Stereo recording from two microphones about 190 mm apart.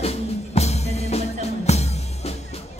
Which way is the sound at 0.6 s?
35° left (ahead or behind).